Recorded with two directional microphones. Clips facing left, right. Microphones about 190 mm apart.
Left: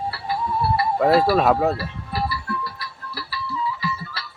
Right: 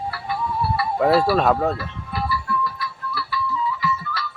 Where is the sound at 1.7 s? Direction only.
35° left (ahead or behind).